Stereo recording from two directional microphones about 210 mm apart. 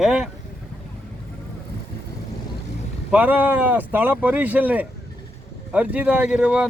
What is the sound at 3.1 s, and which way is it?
Speech, 10° right (ahead or behind).